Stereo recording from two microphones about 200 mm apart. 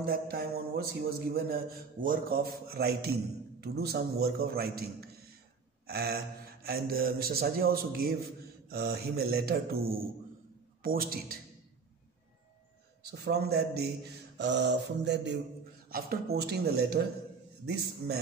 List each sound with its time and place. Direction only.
0.0 s a man's voice: 50° right (ahead or behind)
5.9 s a man's voice: 50° right (ahead or behind)
13.0 s a man's voice: 55° right (ahead or behind)
14.4 s mantra: 60° right (ahead or behind)
15.9 s a man's voice: 50° right (ahead or behind)